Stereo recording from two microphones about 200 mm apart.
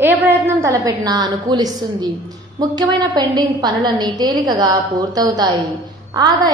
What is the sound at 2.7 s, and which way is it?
A woman's voice, 20° right (ahead or behind).